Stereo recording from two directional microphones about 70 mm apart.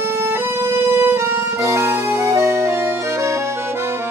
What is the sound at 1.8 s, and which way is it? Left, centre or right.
Music, right.